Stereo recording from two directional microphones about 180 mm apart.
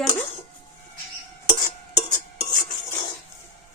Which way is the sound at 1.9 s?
25° left (ahead or behind).